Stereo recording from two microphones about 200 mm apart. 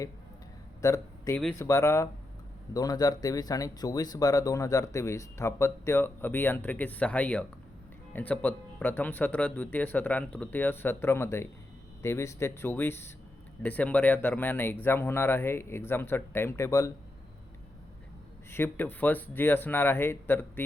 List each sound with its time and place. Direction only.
0.8 s speech: 15° left (ahead or behind)
18.5 s speech: 10° left (ahead or behind)